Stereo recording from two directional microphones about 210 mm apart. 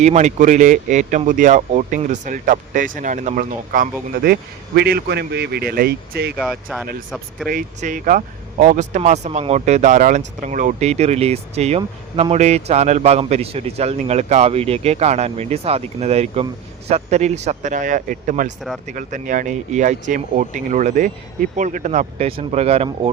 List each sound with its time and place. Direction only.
0.0 s a man's voice: 35° right (ahead or behind); by 6.3 s 50° right (ahead or behind)
6.3 s speech: centre (ahead or behind)
7.4 s speech: 40° right (ahead or behind)